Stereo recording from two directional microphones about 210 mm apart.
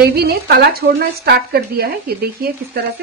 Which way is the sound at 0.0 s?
50° right (ahead or behind).